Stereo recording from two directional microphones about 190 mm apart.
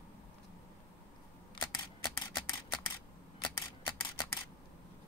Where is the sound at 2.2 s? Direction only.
20° left (ahead or behind).